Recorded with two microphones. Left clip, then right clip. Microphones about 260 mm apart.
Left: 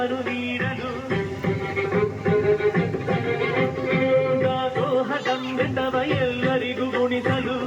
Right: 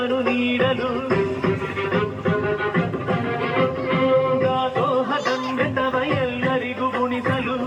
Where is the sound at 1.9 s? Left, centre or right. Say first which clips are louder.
Left 1 dB; centre.